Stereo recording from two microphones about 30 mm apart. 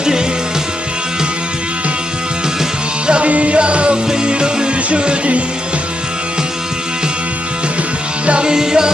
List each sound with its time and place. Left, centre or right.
3.1 s music: right
8.5 s music: right